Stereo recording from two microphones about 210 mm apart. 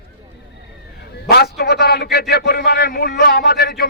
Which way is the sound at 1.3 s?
50° left (ahead or behind).